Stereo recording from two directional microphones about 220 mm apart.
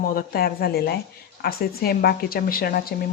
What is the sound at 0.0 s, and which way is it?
A woman's voice, 40° left (ahead or behind).